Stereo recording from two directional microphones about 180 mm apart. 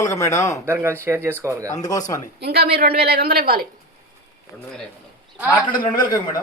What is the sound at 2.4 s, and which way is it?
A woman's voice, 60° right (ahead or behind).